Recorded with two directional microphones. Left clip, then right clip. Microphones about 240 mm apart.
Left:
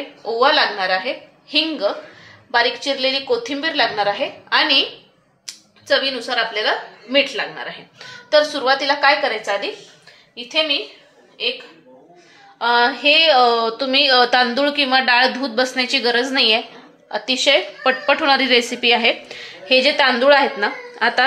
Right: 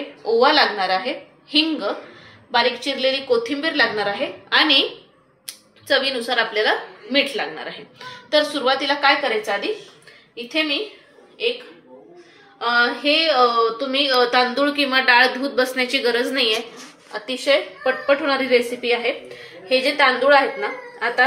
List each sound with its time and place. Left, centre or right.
0.2 s a woman's voice: left
5.9 s a woman's voice: left
12.5 s a woman's voice: left